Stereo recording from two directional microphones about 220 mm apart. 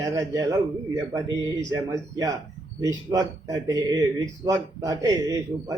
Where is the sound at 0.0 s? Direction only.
15° right (ahead or behind).